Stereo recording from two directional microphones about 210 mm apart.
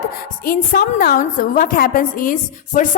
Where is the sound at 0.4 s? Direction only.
40° left (ahead or behind).